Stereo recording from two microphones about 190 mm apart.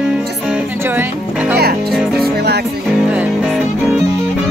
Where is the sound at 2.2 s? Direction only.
55° right (ahead or behind).